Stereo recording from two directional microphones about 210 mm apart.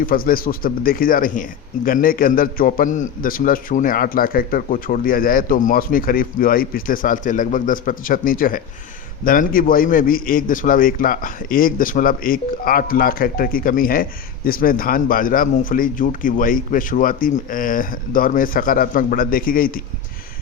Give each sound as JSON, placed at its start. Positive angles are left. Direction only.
{"t": 0.0, "sound": "a man's voice", "side_deg": 45}